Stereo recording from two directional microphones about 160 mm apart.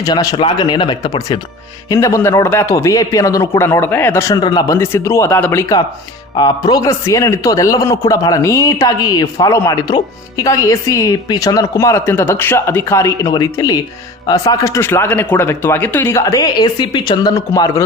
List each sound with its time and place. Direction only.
0.0 s a man's voice: 25° left (ahead or behind)